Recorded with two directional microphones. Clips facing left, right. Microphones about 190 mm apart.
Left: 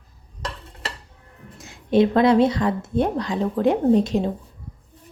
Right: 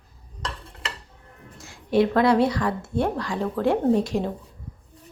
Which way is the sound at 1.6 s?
20° left (ahead or behind).